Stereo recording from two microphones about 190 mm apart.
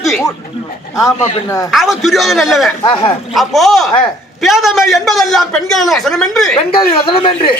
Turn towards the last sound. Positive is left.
turn(degrees=25)  # may be behind; listen again after turning